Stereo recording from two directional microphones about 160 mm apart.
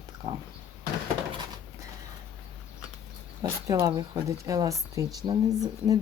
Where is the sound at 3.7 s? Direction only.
20° right (ahead or behind).